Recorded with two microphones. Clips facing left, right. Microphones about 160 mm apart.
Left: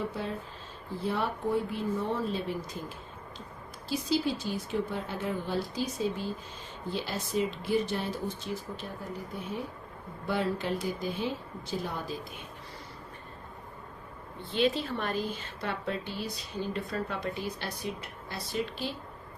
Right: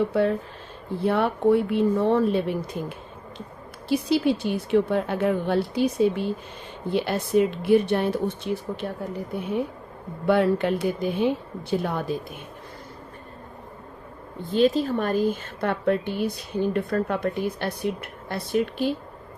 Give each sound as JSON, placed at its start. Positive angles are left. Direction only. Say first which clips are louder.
{"t": 0.1, "sound": "a woman's voice", "louder": "right 13 dB", "side_deg": -65}
{"t": 3.8, "sound": "a woman's voice", "louder": "right 8 dB", "side_deg": -65}
{"t": 10.2, "sound": "a woman's voice", "louder": "right 10 dB", "side_deg": -65}
{"t": 14.5, "sound": "a woman's voice", "louder": "right 8 dB", "side_deg": -40}